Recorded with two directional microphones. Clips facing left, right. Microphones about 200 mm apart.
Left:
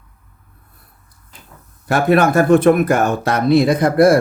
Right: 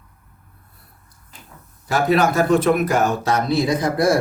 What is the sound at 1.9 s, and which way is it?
Speech, 55° left (ahead or behind).